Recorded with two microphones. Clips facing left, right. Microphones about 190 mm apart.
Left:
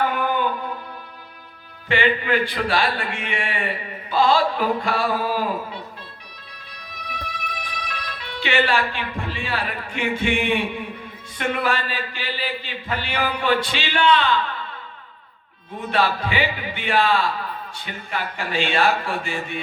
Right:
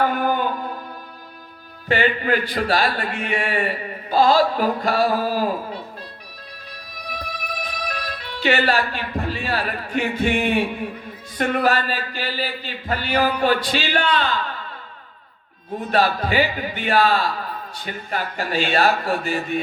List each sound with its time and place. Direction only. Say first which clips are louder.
0.0 s music: right 2 dB; 40° right (ahead or behind)
1.9 s a man's voice: right 1 dB; 40° right (ahead or behind)
7.4 s a man's voice: right 4 dB; 40° right (ahead or behind)
15.9 s a man's voice: right 2 dB; 40° right (ahead or behind)